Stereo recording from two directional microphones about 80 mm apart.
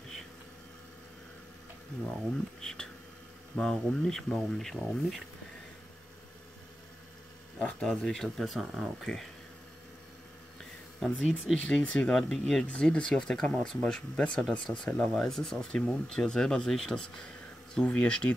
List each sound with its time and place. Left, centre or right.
2.6 s speech: centre
7.5 s speech: centre
8.0 s speech: centre
11.0 s speech: centre